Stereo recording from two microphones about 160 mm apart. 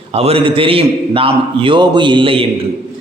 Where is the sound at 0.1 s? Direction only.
40° right (ahead or behind).